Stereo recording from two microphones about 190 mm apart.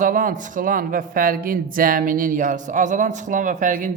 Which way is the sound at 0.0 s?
45° right (ahead or behind).